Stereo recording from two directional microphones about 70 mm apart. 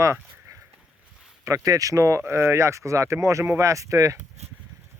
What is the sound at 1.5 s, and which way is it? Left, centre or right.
Speech, right.